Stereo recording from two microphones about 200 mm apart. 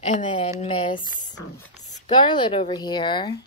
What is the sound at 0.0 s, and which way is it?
Speech, 25° left (ahead or behind).